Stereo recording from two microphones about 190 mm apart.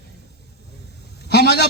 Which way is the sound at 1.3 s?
60° left (ahead or behind).